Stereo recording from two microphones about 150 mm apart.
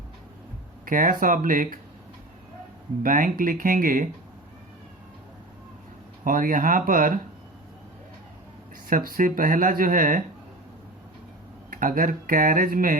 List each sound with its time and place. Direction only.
0.9 s speech: 65° right (ahead or behind)
3.0 s speech: 65° right (ahead or behind)
6.2 s speech: 65° right (ahead or behind)
8.9 s speech: 75° right (ahead or behind)
11.7 s speech: 65° right (ahead or behind)